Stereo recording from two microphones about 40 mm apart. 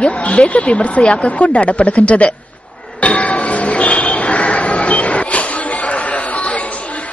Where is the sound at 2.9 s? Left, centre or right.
Left.